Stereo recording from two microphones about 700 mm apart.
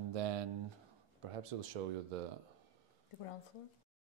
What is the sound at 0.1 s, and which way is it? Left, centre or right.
Speech, right.